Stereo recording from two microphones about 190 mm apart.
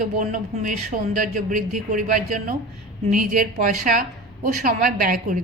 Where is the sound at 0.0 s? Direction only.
45° right (ahead or behind).